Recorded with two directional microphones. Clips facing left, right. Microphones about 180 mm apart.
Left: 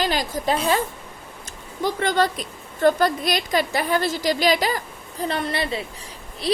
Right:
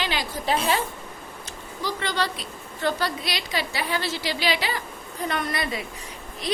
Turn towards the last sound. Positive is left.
turn(degrees=35)  # may be behind; listen again after turning